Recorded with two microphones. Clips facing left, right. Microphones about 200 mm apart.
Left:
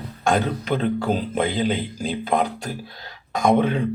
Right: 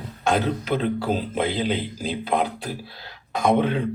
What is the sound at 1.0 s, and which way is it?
Speech, 50° left (ahead or behind).